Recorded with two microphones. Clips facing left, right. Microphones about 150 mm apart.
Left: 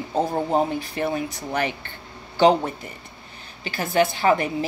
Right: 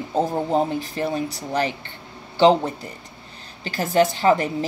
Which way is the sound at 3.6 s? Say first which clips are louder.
Right 2 dB; 35° right (ahead or behind).